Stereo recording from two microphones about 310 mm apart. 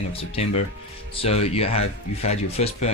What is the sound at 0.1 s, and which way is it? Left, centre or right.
A man's voice, centre.